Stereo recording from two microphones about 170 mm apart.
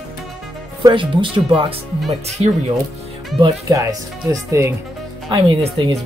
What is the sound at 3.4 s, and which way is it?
Speech, 20° right (ahead or behind).